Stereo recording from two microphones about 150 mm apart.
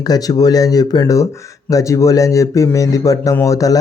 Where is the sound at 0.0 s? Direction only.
25° left (ahead or behind).